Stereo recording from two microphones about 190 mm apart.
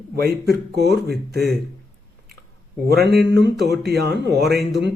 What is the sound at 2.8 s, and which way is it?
Speech, 55° right (ahead or behind).